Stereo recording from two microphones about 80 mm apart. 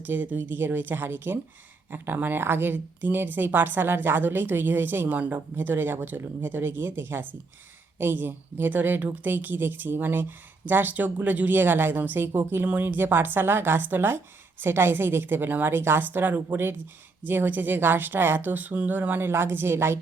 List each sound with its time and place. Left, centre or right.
0.0 s a woman's voice: right